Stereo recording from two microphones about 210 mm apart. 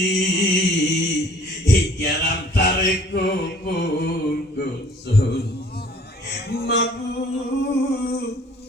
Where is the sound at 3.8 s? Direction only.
50° left (ahead or behind).